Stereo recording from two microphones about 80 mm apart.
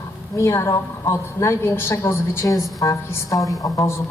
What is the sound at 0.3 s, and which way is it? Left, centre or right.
A woman's voice, left.